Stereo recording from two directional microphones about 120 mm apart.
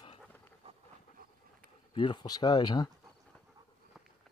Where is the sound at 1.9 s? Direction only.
40° left (ahead or behind).